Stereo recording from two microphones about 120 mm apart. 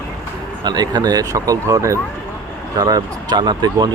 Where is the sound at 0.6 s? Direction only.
35° right (ahead or behind).